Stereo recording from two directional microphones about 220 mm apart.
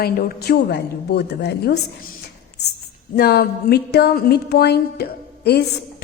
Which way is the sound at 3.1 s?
45° left (ahead or behind).